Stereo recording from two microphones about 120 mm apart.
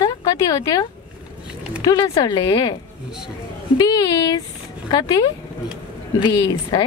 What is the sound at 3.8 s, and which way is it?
Speech, 30° left (ahead or behind).